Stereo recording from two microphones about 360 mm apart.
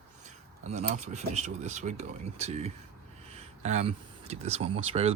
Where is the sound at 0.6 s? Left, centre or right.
Centre.